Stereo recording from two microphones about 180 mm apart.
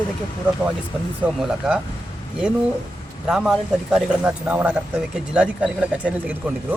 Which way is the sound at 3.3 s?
5° right (ahead or behind).